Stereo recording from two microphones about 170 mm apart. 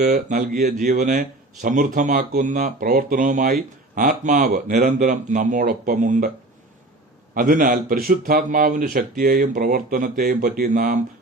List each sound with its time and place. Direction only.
0.0 s speech: 50° right (ahead or behind)
7.3 s speech: 55° right (ahead or behind)